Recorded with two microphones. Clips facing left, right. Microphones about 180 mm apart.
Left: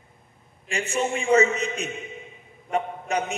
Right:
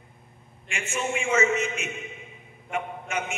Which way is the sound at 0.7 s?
35° left (ahead or behind).